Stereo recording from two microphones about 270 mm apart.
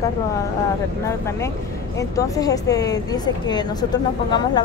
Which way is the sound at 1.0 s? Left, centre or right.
Centre.